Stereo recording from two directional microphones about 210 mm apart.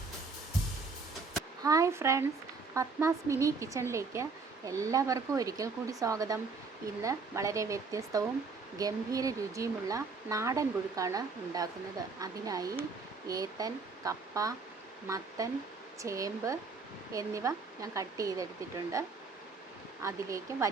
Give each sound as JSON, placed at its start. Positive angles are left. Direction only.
{"t": 1.6, "sound": "speech", "side_deg": -15}
{"t": 20.0, "sound": "speech", "side_deg": -15}